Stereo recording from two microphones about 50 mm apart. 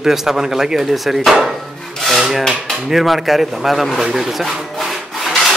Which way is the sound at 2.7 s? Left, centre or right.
Centre.